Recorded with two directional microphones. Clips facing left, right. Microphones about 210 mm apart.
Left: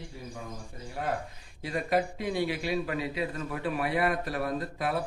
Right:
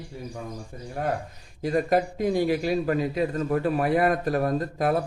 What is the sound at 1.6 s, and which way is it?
A man's voice, 45° right (ahead or behind).